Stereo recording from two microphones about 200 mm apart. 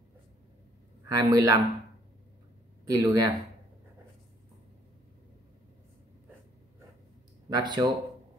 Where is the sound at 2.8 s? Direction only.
20° right (ahead or behind).